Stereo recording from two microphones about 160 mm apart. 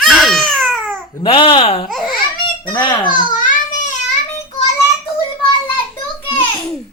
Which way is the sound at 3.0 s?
55° left (ahead or behind).